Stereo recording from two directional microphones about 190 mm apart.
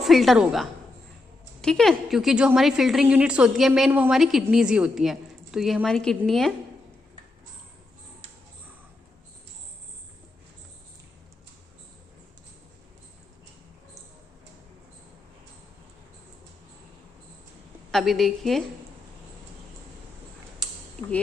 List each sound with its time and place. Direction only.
0.0 s a woman's voice: centre (ahead or behind)
17.9 s a woman's voice: centre (ahead or behind)
21.0 s speech: 35° right (ahead or behind)